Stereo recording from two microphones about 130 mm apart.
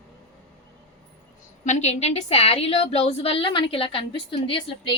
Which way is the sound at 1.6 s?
60° left (ahead or behind).